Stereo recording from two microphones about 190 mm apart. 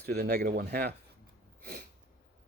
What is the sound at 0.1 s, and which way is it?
Speech, 55° right (ahead or behind).